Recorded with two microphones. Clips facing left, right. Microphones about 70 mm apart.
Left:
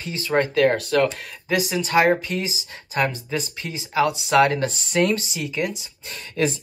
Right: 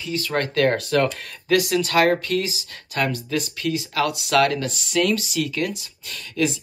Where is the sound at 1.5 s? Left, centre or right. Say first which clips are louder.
Right 2 dB; centre.